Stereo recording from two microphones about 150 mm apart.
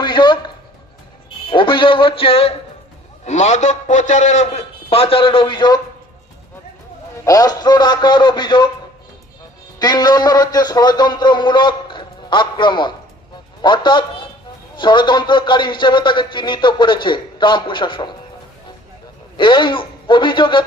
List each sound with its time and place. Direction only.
0.0 s a sound: 30° left (ahead or behind)
1.5 s a man's voice: 35° left (ahead or behind)
3.2 s a man's voice: 50° left (ahead or behind); by 5.8 s 30° left (ahead or behind)
7.3 s a man's voice: 25° left (ahead or behind)
9.7 s a man's voice: 25° left (ahead or behind)
19.4 s a man's voice: 30° left (ahead or behind)